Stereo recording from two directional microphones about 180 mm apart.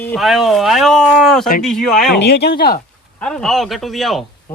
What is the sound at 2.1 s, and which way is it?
Speech, 70° left (ahead or behind).